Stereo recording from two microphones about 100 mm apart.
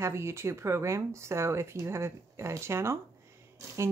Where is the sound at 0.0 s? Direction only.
25° right (ahead or behind).